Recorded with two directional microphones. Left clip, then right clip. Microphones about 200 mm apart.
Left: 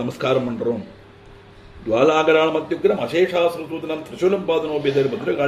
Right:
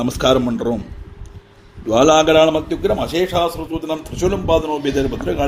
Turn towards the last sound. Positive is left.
turn(degrees=-50)  # may be behind; listen again after turning